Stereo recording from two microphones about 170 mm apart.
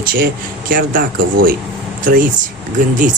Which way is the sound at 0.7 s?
55° right (ahead or behind).